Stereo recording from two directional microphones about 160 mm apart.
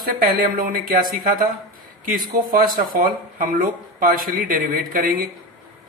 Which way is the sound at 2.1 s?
60° right (ahead or behind).